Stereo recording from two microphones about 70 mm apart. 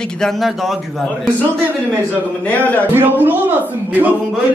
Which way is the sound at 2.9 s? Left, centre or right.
Right.